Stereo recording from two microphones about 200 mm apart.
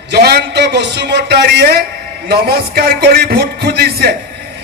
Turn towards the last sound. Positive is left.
turn(degrees=-50)  # may be behind; listen again after turning